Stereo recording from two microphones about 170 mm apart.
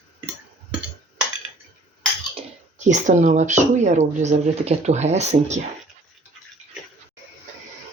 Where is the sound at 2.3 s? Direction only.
45° right (ahead or behind).